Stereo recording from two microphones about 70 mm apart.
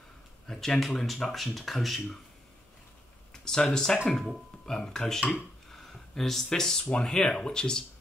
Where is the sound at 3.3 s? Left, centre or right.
Centre.